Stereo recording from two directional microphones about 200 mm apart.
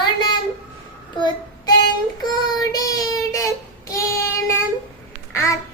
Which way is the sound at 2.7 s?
15° left (ahead or behind).